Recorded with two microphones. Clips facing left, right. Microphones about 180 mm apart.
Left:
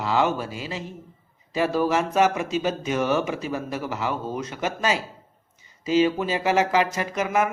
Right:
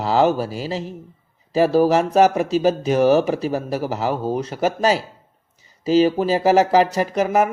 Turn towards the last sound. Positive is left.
turn(degrees=-40)  # may be behind; listen again after turning